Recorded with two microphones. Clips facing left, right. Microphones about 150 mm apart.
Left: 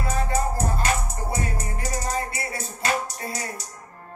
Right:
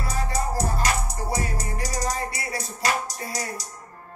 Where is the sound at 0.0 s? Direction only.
35° right (ahead or behind).